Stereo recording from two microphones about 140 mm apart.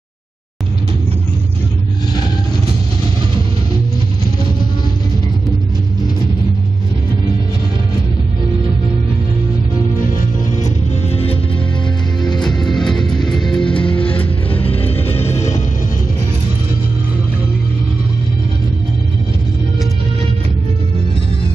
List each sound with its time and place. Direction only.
12.4 s music: 5° left (ahead or behind)
13.0 s music: 30° left (ahead or behind)
13.3 s music: 5° left (ahead or behind)
15.0 s music: 45° left (ahead or behind)